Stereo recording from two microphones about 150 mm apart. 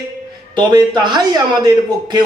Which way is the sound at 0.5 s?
30° right (ahead or behind).